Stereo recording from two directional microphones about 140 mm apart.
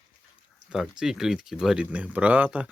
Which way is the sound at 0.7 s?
5° right (ahead or behind).